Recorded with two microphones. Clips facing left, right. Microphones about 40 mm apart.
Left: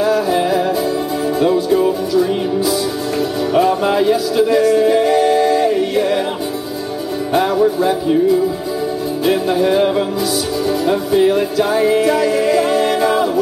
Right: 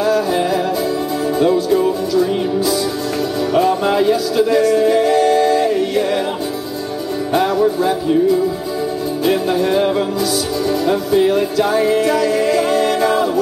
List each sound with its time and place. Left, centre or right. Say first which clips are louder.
0.0 s music: left 1 dB; centre
7.3 s music: left 1 dB; centre
9.2 s music: left 1 dB; centre